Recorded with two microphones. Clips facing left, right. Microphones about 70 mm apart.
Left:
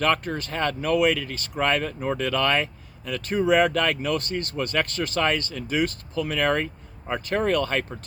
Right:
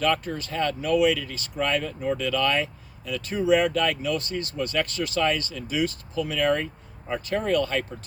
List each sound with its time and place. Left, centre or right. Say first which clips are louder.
0.0 s speech: left 1 dB; left